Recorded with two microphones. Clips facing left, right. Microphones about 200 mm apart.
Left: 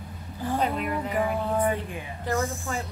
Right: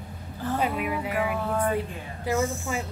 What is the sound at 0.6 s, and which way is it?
Speech, 5° right (ahead or behind).